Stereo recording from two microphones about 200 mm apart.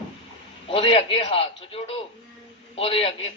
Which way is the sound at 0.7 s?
30° left (ahead or behind).